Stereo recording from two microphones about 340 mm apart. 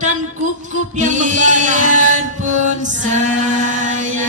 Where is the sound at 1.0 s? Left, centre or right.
Right.